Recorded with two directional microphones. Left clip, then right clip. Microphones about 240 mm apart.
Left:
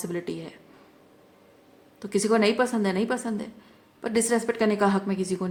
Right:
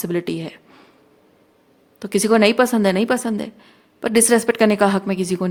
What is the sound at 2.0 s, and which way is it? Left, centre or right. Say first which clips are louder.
A woman's voice: right 7 dB; right.